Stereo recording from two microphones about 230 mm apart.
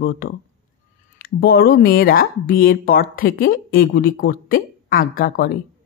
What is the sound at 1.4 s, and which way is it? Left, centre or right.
Speech, left.